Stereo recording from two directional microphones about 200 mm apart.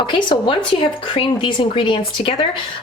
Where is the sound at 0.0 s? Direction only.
25° left (ahead or behind).